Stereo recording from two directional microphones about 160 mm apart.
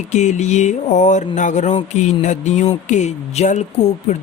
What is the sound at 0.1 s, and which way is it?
Speech, 45° left (ahead or behind).